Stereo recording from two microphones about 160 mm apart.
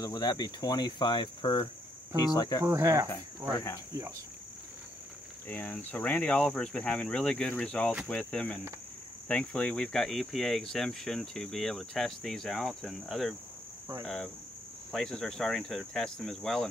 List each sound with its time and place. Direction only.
0.0 s cricket: 25° left (ahead or behind)
2.6 s cricket: 20° right (ahead or behind)
5.5 s speech: 10° left (ahead or behind)